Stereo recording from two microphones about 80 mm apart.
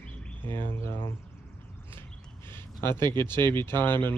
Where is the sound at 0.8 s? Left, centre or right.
Left.